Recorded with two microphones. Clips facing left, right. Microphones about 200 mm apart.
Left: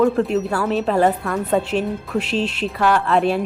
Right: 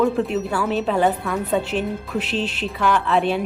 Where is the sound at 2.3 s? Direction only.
Centre (ahead or behind).